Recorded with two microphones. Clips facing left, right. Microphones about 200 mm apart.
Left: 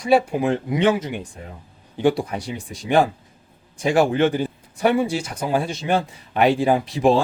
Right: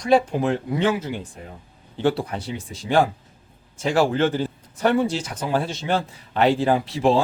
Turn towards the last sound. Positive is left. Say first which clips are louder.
# left 2 dB
turn(degrees=15)  # may be behind; listen again after turning